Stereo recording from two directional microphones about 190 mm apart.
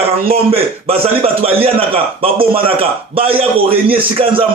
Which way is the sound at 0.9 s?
30° right (ahead or behind).